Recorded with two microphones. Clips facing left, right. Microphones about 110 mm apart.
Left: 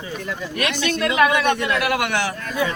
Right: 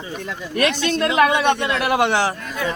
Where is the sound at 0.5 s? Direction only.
35° right (ahead or behind).